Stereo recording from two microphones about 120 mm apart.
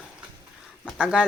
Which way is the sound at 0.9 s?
5° right (ahead or behind).